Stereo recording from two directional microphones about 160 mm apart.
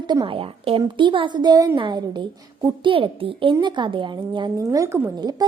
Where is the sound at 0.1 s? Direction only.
30° right (ahead or behind); by 5.1 s 15° right (ahead or behind).